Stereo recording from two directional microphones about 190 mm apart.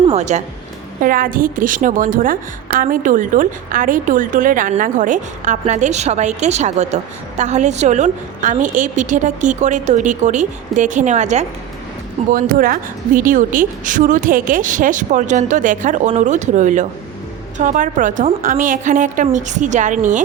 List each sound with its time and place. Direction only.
0.0 s speech: 35° right (ahead or behind)
1.0 s a woman's voice: 45° right (ahead or behind)